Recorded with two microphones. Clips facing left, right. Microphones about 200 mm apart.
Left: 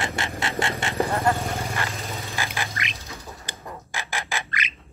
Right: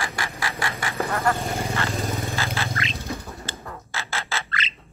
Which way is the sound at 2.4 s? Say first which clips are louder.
Right 2 dB; 15° left (ahead or behind).